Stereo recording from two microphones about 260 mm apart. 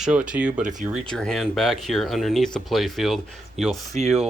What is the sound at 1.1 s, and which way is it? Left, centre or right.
Speech, centre.